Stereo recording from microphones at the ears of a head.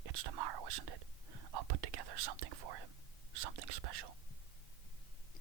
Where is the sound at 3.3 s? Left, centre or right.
Right.